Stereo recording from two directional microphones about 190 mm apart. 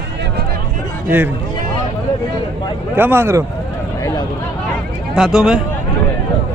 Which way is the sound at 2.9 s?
10° right (ahead or behind).